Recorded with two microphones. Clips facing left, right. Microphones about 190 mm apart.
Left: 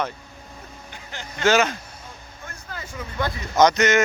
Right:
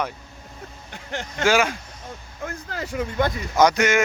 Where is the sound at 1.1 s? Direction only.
60° right (ahead or behind).